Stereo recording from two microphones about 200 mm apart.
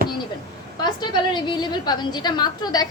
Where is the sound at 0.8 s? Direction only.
20° left (ahead or behind).